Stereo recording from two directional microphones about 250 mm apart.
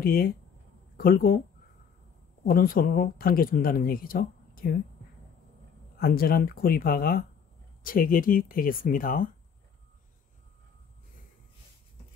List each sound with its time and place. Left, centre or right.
0.0 s speech: left
2.4 s speech: left
5.9 s speech: left